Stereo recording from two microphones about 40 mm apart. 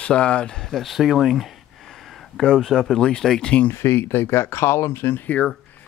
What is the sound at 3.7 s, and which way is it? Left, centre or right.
Speech, left.